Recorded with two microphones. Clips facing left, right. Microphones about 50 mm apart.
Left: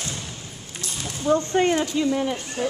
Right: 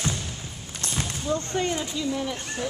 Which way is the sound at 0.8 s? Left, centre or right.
Right.